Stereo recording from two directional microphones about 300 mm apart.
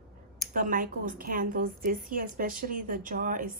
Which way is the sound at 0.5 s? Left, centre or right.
Right.